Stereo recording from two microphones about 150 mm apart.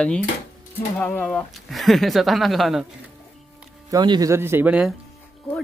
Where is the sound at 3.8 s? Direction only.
25° right (ahead or behind).